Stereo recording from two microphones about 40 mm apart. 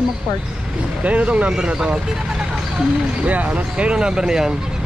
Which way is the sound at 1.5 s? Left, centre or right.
Right.